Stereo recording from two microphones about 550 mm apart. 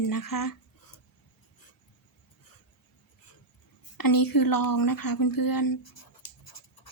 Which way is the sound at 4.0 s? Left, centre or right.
Left.